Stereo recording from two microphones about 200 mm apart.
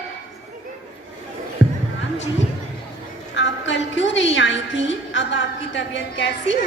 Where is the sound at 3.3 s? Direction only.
65° left (ahead or behind).